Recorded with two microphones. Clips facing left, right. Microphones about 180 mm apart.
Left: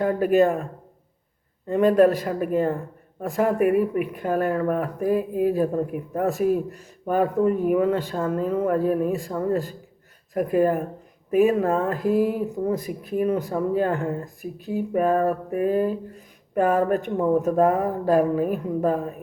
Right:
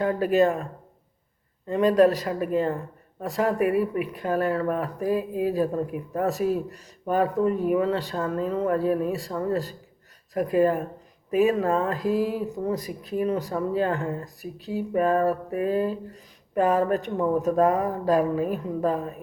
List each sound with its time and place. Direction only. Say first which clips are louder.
0.0 s speech: left 2 dB; 50° left (ahead or behind)